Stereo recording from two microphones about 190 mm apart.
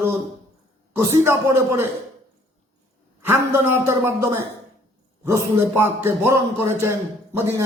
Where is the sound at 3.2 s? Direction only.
10° right (ahead or behind).